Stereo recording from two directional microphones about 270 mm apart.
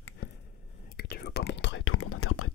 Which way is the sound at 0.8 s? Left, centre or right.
Left.